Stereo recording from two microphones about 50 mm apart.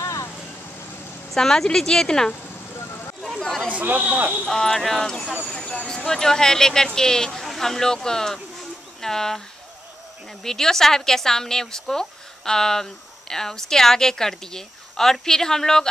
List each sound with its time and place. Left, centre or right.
0.0 s vehicle: left
1.3 s a woman's voice: centre
3.2 s chatter: centre
3.6 s a man's voice: right
4.5 s speech: centre
5.7 s a woman's voice: centre
10.4 s a woman's voice: centre